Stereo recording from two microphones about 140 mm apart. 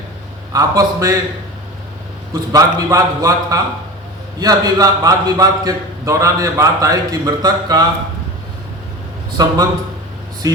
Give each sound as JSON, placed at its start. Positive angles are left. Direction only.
{"t": 0.5, "sound": "a man's voice", "side_deg": -25}
{"t": 2.3, "sound": "a man's voice", "side_deg": -30}
{"t": 9.4, "sound": "a man's voice", "side_deg": -30}